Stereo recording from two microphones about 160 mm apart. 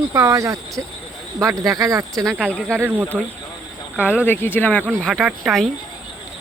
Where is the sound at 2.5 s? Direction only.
5° left (ahead or behind).